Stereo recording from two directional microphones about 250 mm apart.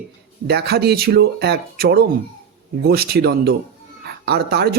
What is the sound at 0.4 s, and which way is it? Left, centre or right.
A man's voice, right.